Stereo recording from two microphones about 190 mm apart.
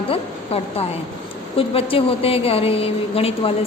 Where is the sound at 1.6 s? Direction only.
30° left (ahead or behind).